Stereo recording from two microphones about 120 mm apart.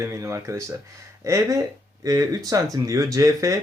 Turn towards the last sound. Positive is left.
turn(degrees=-25)  # may be behind; listen again after turning